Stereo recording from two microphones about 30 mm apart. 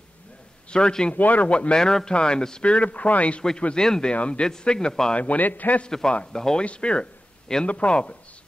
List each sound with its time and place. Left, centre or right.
0.7 s a man's voice: left
1.1 s speech: left
1.5 s speech: left
1.8 s speech: left
2.1 s speech: left
2.6 s speech: left
3.7 s speech: left
4.1 s speech: left
4.7 s speech: centre
5.1 s speech: left
5.4 s a man's voice: left
5.9 s speech: centre
6.6 s speech: left